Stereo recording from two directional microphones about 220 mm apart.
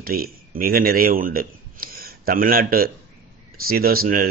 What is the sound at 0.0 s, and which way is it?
A man's voice, 40° right (ahead or behind).